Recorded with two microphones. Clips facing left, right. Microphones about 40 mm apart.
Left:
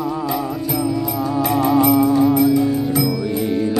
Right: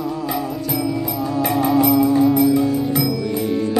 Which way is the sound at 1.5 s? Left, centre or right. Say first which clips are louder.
Left 1 dB; centre.